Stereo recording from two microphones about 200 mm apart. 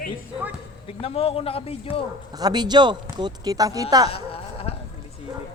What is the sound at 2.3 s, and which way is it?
Speech, 20° right (ahead or behind).